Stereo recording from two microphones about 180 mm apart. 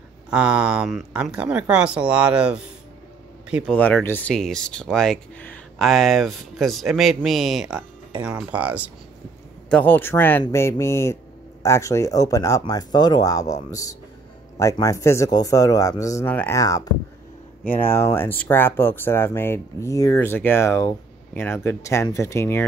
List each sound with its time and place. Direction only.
0.3 s a man's voice: 5° right (ahead or behind)
3.7 s speech: 10° left (ahead or behind); by 8.9 s 10° right (ahead or behind)
9.7 s speech: 10° left (ahead or behind)